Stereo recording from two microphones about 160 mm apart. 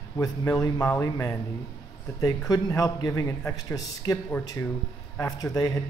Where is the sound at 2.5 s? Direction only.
20° left (ahead or behind).